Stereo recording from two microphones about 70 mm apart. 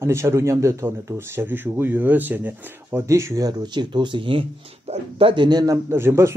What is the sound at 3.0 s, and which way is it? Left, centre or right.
Speech, right.